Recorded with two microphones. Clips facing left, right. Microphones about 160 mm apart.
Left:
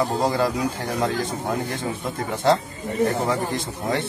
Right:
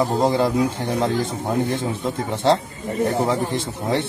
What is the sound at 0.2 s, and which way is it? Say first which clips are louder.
Speech: right 3 dB; 25° right (ahead or behind).